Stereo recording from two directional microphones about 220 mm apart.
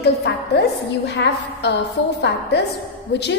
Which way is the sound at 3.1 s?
50° left (ahead or behind).